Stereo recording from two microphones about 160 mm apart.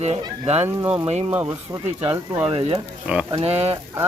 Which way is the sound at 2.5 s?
40° right (ahead or behind).